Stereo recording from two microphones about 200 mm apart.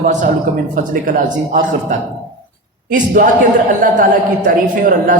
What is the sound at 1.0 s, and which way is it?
Speech, 40° right (ahead or behind).